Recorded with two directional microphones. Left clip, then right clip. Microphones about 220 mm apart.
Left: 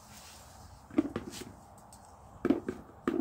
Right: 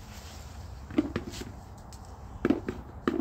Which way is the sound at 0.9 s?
5° left (ahead or behind).